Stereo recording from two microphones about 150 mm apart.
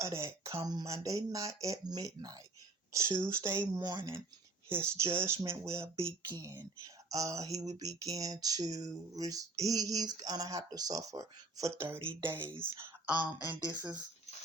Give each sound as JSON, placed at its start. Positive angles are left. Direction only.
{"t": 0.0, "sound": "speech", "side_deg": -20}
{"t": 3.6, "sound": "speech", "side_deg": -30}
{"t": 4.7, "sound": "speech", "side_deg": -15}
{"t": 12.4, "sound": "speech", "side_deg": -35}
{"t": 12.7, "sound": "a sound", "side_deg": -15}
{"t": 13.7, "sound": "speech", "side_deg": -10}